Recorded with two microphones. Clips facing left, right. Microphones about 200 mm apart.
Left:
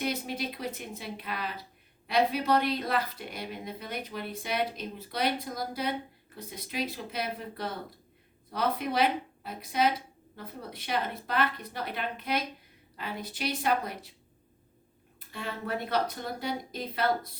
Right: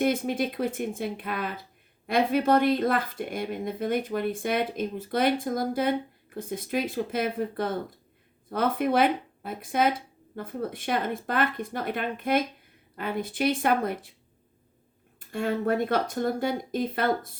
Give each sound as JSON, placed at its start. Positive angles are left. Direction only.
{"t": 0.0, "sound": "speech", "side_deg": -50}
{"t": 15.3, "sound": "speech", "side_deg": -50}